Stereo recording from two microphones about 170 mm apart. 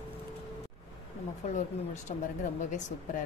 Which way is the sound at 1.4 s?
45° left (ahead or behind).